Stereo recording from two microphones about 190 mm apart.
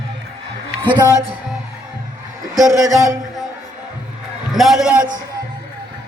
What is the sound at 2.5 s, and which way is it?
Speech, 20° right (ahead or behind).